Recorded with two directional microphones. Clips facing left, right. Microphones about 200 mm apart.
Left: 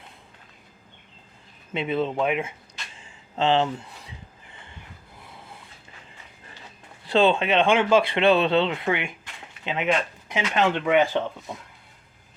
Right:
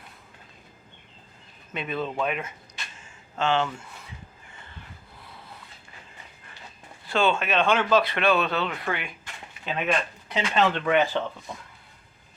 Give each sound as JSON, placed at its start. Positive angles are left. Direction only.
{"t": 1.7, "sound": "speech", "side_deg": 25}
{"t": 3.3, "sound": "speech", "side_deg": 35}
{"t": 7.3, "sound": "speech", "side_deg": 20}